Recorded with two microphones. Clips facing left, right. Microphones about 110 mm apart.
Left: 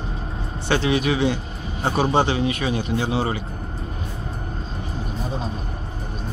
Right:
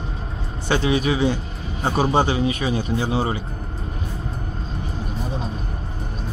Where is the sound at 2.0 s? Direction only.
10° right (ahead or behind).